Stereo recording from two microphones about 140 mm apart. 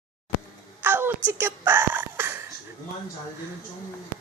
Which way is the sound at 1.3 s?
15° right (ahead or behind).